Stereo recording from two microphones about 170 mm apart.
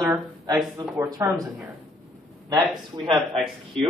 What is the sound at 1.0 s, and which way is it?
Speech, 20° right (ahead or behind).